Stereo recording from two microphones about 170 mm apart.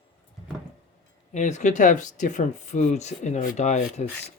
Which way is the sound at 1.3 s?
45° left (ahead or behind).